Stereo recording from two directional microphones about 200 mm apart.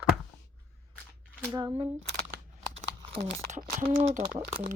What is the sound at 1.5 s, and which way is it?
Speech, 20° right (ahead or behind).